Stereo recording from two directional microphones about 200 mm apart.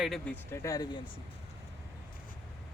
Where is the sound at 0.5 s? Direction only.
15° left (ahead or behind).